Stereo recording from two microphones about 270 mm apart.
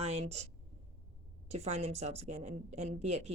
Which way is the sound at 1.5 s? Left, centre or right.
Right.